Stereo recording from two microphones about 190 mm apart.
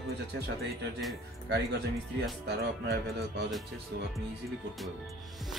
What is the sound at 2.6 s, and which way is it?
Speech, 60° right (ahead or behind).